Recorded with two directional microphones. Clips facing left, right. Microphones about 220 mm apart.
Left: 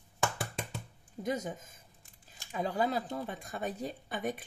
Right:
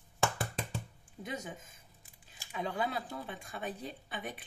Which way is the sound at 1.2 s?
40° left (ahead or behind).